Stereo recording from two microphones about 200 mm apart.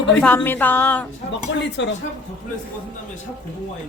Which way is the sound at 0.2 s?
5° left (ahead or behind).